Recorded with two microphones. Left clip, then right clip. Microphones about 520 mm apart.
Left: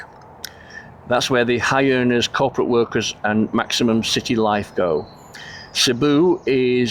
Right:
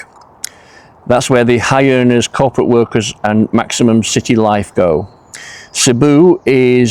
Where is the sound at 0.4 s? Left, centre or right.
Right.